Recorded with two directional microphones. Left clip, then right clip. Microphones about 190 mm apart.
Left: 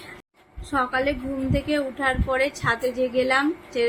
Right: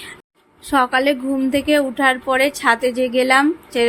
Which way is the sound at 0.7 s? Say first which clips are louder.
Right 7 dB; 50° right (ahead or behind).